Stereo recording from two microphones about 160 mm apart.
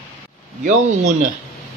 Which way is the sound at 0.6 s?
55° right (ahead or behind).